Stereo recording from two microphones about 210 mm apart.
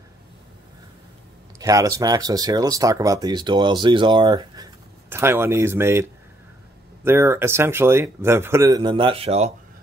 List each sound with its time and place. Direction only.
1.6 s speech: 15° right (ahead or behind)